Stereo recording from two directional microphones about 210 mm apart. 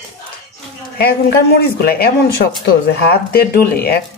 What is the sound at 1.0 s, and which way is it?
Speech, 50° left (ahead or behind).